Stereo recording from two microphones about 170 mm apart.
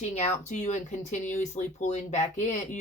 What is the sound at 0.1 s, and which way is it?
Speech, 45° left (ahead or behind).